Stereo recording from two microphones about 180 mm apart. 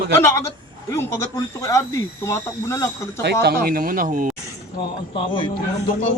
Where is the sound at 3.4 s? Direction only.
55° right (ahead or behind).